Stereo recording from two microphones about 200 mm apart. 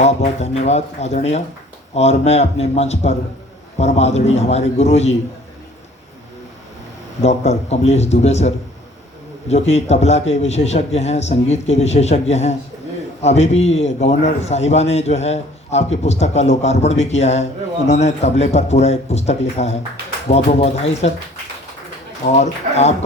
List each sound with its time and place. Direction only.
0.0 s a man's voice: 35° left (ahead or behind)
7.2 s a man's voice: 35° left (ahead or behind)
22.3 s a man's voice: 35° left (ahead or behind)